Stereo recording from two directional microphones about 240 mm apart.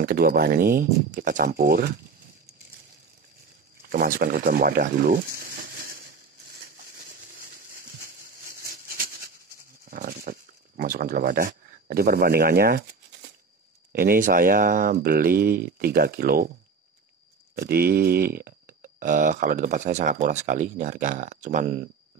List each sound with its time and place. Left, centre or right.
0.0 s speech: right
3.8 s speech: right
7.3 s a sound: right
13.9 s speech: right
17.6 s speech: right